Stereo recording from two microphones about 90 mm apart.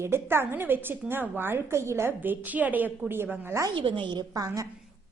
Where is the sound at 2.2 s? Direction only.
20° right (ahead or behind).